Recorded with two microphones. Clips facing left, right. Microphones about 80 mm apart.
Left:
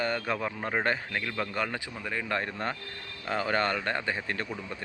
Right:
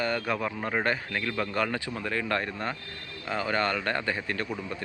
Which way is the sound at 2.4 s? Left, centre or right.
Left.